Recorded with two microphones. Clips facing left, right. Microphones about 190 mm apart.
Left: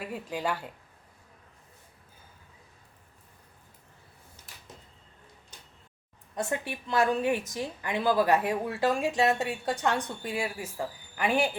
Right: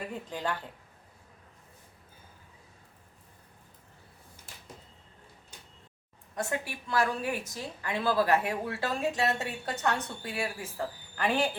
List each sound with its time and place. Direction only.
0.0 s a woman's voice: 10° left (ahead or behind)
6.3 s a woman's voice: 20° left (ahead or behind)